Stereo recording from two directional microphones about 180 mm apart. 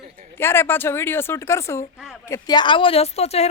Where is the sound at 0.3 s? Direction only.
15° left (ahead or behind).